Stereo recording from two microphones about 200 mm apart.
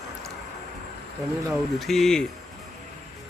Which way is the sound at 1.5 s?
Centre (ahead or behind).